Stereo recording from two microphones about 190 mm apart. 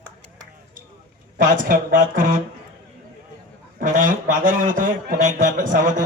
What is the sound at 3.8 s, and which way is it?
A man's voice, 45° right (ahead or behind).